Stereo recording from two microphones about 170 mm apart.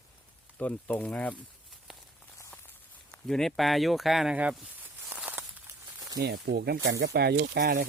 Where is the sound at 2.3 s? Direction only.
15° left (ahead or behind).